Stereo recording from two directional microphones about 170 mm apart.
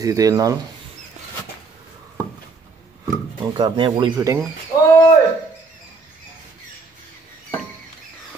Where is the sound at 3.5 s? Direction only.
30° right (ahead or behind).